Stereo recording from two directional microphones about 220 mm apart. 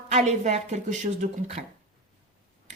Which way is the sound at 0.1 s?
30° right (ahead or behind).